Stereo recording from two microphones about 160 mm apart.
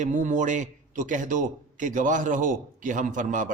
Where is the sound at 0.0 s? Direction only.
55° right (ahead or behind).